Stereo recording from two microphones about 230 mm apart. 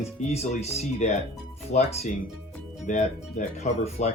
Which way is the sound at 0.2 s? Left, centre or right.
Left.